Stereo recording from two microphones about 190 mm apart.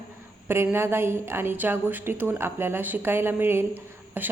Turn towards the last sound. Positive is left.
turn(degrees=-10)  # may be behind; listen again after turning